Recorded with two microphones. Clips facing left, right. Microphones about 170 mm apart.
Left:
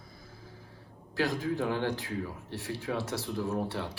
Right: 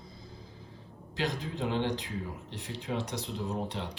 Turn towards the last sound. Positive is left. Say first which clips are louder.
# left 2 dB
turn(degrees=-20)  # may be behind; listen again after turning